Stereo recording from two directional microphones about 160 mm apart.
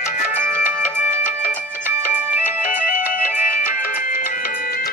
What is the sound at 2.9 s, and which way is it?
Music, 55° left (ahead or behind).